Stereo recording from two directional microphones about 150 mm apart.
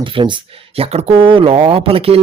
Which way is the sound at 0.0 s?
35° right (ahead or behind).